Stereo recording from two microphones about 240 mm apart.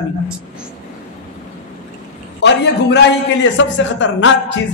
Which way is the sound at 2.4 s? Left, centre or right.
Left.